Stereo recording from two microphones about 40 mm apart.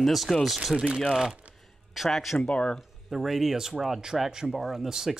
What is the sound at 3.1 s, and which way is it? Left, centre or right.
Speech, centre.